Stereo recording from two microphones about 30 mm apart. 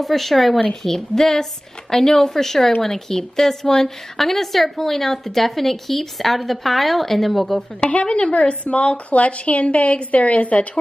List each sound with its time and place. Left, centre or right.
0.0 s speech: centre
0.8 s speech: centre
7.9 s a woman's voice: left